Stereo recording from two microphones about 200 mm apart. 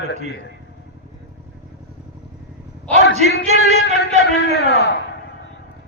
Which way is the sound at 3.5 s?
35° right (ahead or behind).